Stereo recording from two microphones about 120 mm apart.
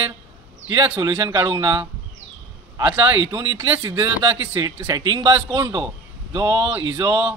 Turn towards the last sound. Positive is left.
turn(degrees=-30)  # may be behind; listen again after turning